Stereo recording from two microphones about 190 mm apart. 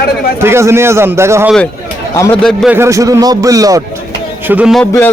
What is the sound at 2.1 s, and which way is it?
Speech, 15° left (ahead or behind).